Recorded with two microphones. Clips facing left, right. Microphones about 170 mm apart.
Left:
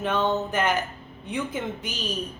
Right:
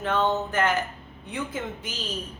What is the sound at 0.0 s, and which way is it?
A woman's voice, 15° left (ahead or behind).